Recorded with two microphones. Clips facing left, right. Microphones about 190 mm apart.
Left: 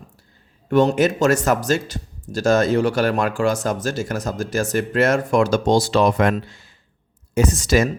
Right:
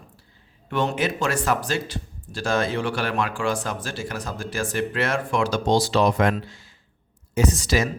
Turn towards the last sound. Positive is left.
turn(degrees=50)  # may be behind; listen again after turning